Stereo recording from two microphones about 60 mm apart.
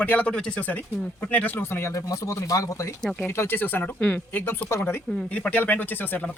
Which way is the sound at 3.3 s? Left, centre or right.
Left.